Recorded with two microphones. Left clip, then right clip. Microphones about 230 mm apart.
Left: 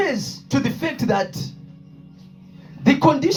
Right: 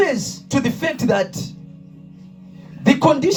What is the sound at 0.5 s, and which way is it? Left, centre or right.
Speech, right.